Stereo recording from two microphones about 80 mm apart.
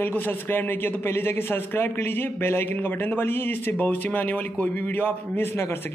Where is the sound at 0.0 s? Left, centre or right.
Left.